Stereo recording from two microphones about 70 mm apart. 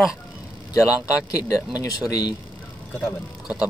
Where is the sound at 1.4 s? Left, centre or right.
Left.